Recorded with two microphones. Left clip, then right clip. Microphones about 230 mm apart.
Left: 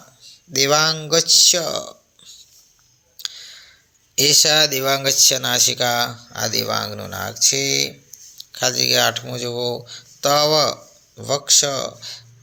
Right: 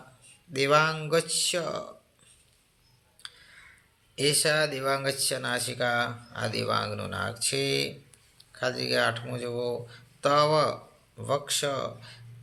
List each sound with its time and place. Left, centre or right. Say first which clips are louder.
0.5 s speech: left 6 dB; left
3.2 s a sound: left 15 dB; left
4.1 s speech: left 10 dB; left
8.4 s speech: left 10 dB; left